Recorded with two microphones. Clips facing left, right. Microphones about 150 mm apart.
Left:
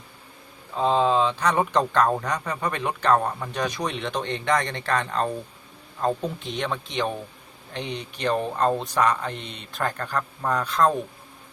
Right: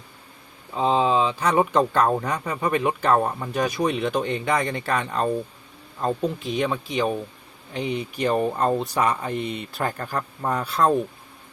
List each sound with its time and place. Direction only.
0.8 s speech: 10° right (ahead or behind)